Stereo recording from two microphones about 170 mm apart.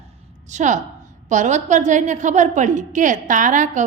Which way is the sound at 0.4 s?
45° right (ahead or behind).